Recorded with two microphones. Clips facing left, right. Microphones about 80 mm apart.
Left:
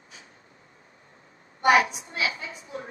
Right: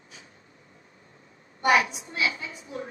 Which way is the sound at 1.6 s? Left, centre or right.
Left.